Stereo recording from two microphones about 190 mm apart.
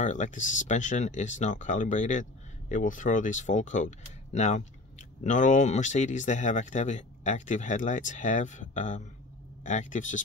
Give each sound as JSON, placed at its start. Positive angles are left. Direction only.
{"t": 0.0, "sound": "speech", "side_deg": 40}